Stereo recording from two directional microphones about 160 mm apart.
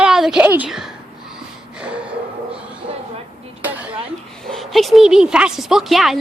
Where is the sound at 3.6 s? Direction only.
10° right (ahead or behind).